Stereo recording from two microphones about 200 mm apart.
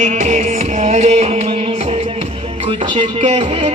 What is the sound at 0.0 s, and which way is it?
Music, 35° right (ahead or behind).